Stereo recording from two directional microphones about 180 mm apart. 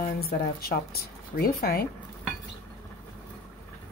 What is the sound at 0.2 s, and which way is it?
Speech, 60° left (ahead or behind).